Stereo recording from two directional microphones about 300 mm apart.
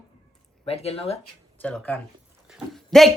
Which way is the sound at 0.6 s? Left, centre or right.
Centre.